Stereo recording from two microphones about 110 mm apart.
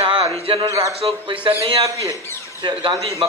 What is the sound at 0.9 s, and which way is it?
Speech, 60° right (ahead or behind).